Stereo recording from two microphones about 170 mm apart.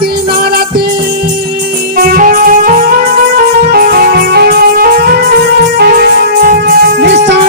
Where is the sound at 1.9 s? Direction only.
60° right (ahead or behind).